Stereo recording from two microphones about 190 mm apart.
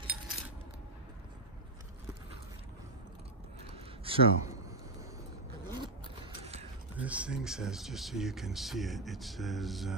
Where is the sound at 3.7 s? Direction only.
30° right (ahead or behind).